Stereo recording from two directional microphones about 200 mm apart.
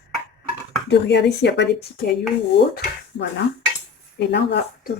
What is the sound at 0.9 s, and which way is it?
Speech, 60° left (ahead or behind).